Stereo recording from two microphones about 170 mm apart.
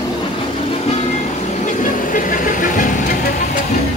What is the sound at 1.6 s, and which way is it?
Vehicle, 50° left (ahead or behind).